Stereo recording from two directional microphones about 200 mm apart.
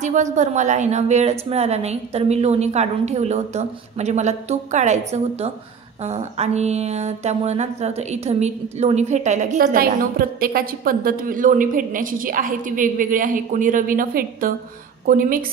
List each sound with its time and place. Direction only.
0.0 s mantra: 35° right (ahead or behind)
15.0 s speech: 45° right (ahead or behind)